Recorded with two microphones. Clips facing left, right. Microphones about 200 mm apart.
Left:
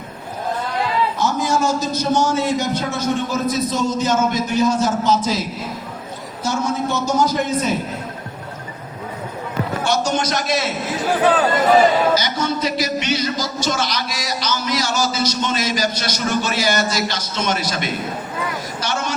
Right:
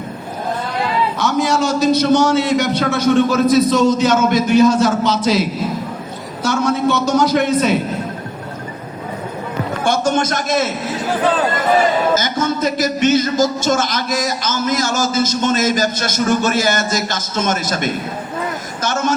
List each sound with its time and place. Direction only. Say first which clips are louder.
1.2 s a man's voice: right 3 dB; 70° right (ahead or behind)
9.8 s speech: right 4 dB; 50° right (ahead or behind)
12.1 s speech: right 2 dB; 50° right (ahead or behind)
18.8 s a sound: right 6 dB; 45° right (ahead or behind)